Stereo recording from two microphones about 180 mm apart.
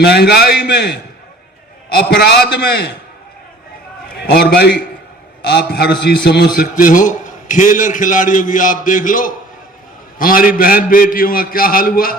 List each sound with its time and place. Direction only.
0.0 s a man's voice: 65° left (ahead or behind)
4.2 s a man's voice: 65° left (ahead or behind)